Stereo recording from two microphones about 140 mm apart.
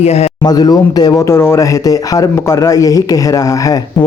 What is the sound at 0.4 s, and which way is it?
Speech, 30° left (ahead or behind).